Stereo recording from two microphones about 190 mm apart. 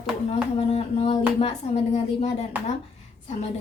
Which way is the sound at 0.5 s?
30° left (ahead or behind).